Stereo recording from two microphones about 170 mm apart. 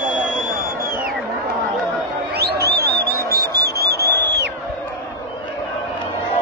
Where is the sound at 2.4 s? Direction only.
70° right (ahead or behind).